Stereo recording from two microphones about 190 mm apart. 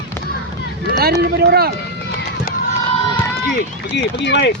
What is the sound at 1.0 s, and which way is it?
Speech, 55° right (ahead or behind).